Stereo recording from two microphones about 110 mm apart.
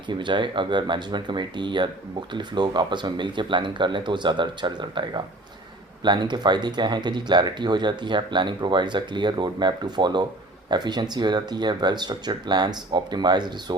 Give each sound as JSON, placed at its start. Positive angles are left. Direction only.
{"t": 0.1, "sound": "speech", "side_deg": -45}